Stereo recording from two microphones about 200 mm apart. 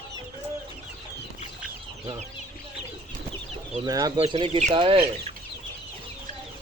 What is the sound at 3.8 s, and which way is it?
Speech, 20° right (ahead or behind).